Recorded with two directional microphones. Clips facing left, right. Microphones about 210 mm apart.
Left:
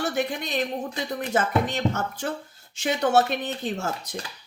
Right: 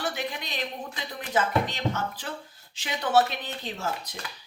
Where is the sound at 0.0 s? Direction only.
45° left (ahead or behind).